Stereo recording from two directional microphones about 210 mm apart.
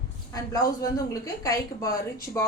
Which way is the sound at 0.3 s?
15° left (ahead or behind).